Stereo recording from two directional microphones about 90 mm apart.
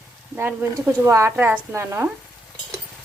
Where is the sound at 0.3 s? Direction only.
25° right (ahead or behind).